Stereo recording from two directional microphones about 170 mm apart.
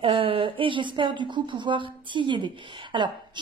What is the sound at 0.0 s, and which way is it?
A woman's voice, 30° right (ahead or behind).